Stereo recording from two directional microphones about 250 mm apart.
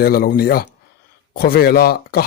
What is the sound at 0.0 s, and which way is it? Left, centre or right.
Speech, left.